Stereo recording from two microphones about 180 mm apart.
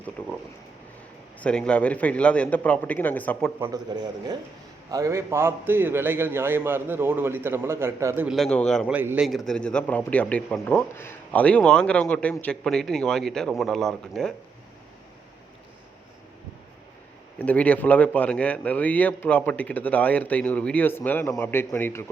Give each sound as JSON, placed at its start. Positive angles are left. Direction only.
{"t": 0.2, "sound": "a man's voice", "side_deg": 10}
{"t": 1.4, "sound": "a man's voice", "side_deg": 5}
{"t": 3.6, "sound": "a man's voice", "side_deg": -20}
{"t": 8.4, "sound": "speech", "side_deg": 5}
{"t": 8.9, "sound": "speech", "side_deg": -10}
{"t": 17.3, "sound": "a man's voice", "side_deg": 5}